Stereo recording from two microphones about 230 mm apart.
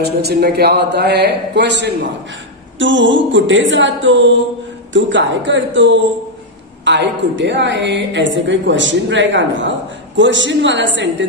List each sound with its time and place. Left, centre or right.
0.0 s a woman's voice: right